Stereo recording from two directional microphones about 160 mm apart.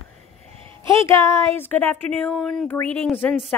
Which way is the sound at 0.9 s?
15° left (ahead or behind).